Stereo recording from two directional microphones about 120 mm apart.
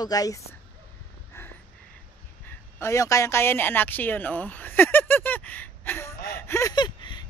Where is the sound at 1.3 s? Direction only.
20° left (ahead or behind).